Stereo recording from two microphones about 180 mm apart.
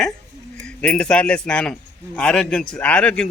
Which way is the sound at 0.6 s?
5° left (ahead or behind).